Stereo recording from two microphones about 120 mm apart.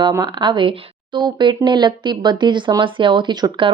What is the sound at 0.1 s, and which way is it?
Speech, 35° right (ahead or behind).